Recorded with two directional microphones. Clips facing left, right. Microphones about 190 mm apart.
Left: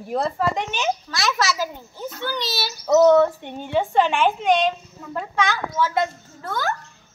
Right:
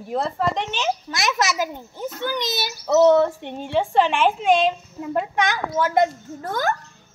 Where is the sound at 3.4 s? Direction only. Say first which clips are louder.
Even; centre (ahead or behind).